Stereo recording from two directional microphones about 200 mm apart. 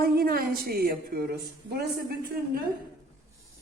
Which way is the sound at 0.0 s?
50° right (ahead or behind).